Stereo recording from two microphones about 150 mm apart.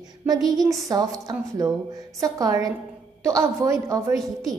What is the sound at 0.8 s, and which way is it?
A woman's voice, 25° right (ahead or behind).